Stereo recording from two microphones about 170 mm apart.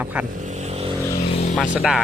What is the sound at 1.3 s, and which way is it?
Vehicle, 35° left (ahead or behind).